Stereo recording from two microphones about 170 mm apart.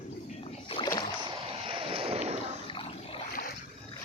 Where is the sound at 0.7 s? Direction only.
30° left (ahead or behind).